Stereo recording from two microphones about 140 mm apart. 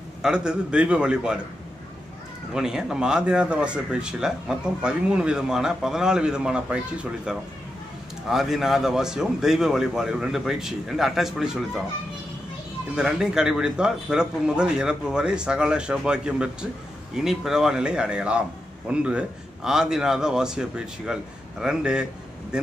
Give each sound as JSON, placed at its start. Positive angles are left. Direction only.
{"t": 0.2, "sound": "a man's voice", "side_deg": -5}
{"t": 2.5, "sound": "speech", "side_deg": -5}
{"t": 12.9, "sound": "speech", "side_deg": -5}